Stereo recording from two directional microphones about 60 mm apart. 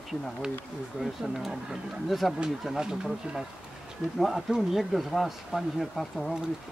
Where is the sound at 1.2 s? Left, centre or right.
Centre.